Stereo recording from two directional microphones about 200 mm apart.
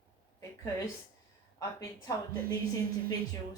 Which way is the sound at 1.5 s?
15° left (ahead or behind).